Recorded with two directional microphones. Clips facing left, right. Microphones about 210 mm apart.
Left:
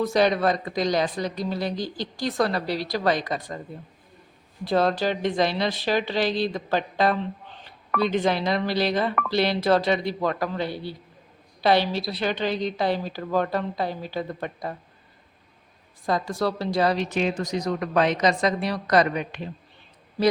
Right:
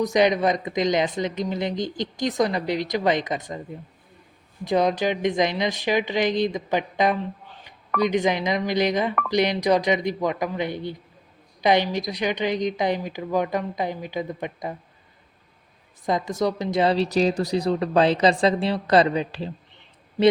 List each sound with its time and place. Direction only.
0.0 s speech: 20° right (ahead or behind)
4.6 s a woman's voice: 15° right (ahead or behind)
16.0 s speech: 20° right (ahead or behind)